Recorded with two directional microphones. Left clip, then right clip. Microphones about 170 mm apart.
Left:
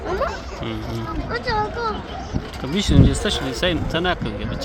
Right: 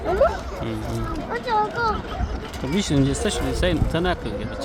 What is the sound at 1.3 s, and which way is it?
Speech, 30° right (ahead or behind).